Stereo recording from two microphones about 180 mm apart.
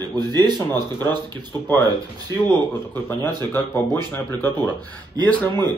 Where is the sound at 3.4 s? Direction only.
10° left (ahead or behind).